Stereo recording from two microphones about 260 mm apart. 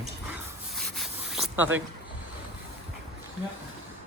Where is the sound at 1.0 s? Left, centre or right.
Centre.